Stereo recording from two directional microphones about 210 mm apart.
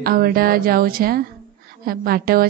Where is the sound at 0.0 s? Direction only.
45° right (ahead or behind).